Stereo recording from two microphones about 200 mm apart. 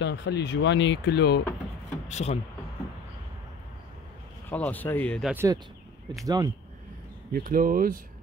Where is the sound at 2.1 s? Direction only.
35° left (ahead or behind).